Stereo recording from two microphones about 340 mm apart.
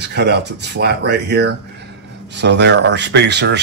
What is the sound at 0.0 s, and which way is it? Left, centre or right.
Speech, right.